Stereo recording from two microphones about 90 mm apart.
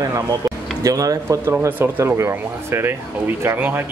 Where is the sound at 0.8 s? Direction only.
40° right (ahead or behind).